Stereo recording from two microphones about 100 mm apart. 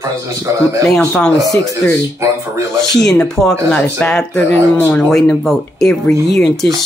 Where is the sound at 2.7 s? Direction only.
5° left (ahead or behind).